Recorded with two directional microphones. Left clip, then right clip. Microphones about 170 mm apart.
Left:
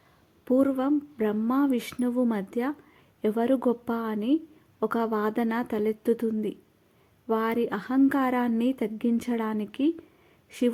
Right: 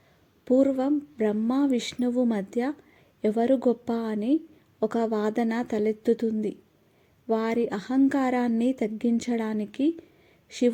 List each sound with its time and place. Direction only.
0.4 s a woman's voice: 5° right (ahead or behind)